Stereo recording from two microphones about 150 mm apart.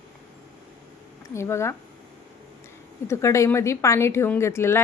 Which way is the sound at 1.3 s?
20° left (ahead or behind).